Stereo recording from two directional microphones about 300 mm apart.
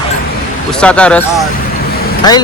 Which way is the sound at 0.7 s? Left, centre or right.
Centre.